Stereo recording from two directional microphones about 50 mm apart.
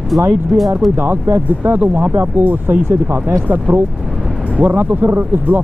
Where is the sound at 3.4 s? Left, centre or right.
Right.